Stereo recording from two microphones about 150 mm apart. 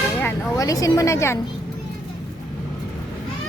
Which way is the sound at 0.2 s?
15° left (ahead or behind).